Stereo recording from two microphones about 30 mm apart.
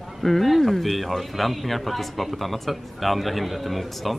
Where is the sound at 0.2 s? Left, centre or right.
Centre.